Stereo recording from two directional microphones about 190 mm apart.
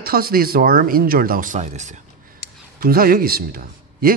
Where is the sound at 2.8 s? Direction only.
50° right (ahead or behind).